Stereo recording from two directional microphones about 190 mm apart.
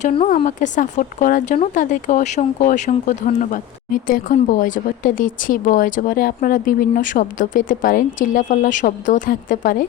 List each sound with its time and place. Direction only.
0.0 s speech: 30° left (ahead or behind)
0.3 s speech: 40° left (ahead or behind)